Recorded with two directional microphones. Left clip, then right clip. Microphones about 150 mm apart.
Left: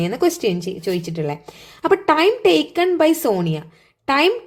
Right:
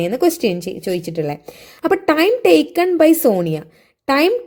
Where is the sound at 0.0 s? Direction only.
35° right (ahead or behind).